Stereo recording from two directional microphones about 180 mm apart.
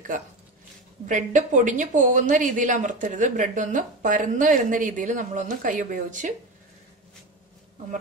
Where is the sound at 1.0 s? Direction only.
45° right (ahead or behind).